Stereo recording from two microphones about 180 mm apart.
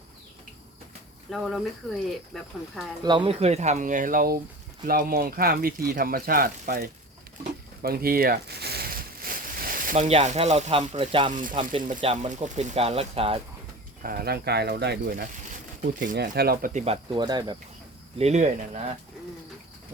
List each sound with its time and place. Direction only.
1.3 s speech: centre (ahead or behind)
3.0 s speech: 25° right (ahead or behind)
14.0 s speech: 55° right (ahead or behind)
16.8 s speech: 30° right (ahead or behind)
18.2 s speech: 40° right (ahead or behind)